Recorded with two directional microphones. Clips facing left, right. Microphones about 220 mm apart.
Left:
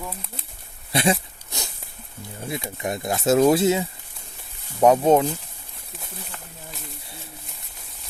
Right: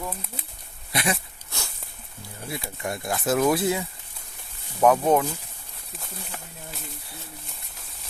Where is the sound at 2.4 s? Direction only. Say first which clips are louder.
Left 3 dB; 20° left (ahead or behind).